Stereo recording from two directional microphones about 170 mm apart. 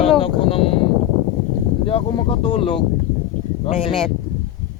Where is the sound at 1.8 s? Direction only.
30° left (ahead or behind).